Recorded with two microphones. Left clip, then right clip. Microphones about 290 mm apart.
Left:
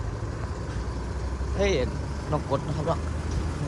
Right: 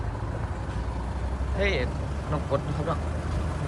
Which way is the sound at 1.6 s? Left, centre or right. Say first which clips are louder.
Left 2 dB; centre.